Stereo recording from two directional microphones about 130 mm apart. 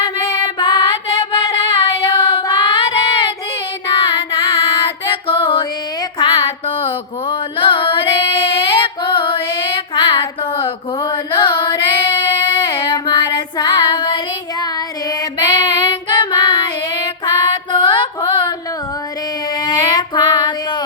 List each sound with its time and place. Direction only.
0.0 s child singing: 30° left (ahead or behind)
1.6 s child singing: 40° left (ahead or behind)
3.9 s music: 40° left (ahead or behind)
6.1 s a sound: 40° left (ahead or behind)
10.6 s female singing: 40° left (ahead or behind)
12.6 s child singing: 35° left (ahead or behind)
15.7 s child singing: 40° left (ahead or behind)
19.6 s child singing: 30° left (ahead or behind)